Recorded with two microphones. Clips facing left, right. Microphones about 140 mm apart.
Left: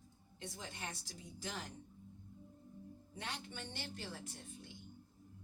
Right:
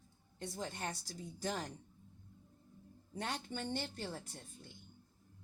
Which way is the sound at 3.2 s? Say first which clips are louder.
Right 6 dB; 40° right (ahead or behind).